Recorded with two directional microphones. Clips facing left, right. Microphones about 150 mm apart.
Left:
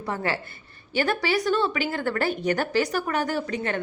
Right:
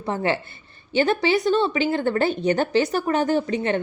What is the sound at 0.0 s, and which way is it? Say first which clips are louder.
A woman's voice: right 4 dB; 25° right (ahead or behind).